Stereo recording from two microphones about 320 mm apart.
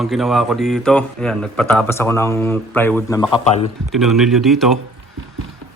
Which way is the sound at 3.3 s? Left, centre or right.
Centre.